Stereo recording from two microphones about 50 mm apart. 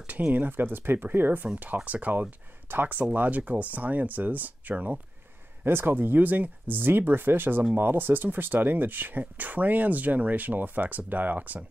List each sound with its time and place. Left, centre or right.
0.3 s speech: right